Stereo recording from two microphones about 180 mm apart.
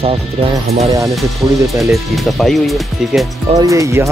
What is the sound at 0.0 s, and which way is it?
Speech, 35° right (ahead or behind).